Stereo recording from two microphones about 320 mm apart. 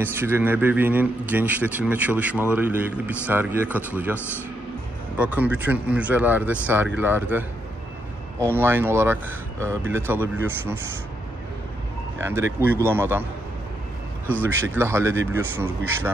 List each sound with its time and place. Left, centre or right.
0.0 s a man's voice: centre
5.2 s a man's voice: centre
8.5 s speech: centre
12.2 s speech: centre
14.4 s speech: centre